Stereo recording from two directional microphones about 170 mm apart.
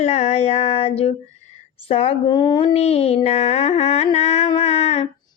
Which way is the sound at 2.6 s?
35° left (ahead or behind).